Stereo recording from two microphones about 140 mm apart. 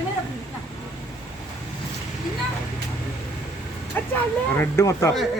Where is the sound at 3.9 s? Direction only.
15° left (ahead or behind).